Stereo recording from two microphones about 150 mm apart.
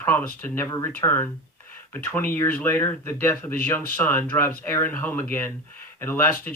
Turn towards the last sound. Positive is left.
turn(degrees=15)  # may be behind; listen again after turning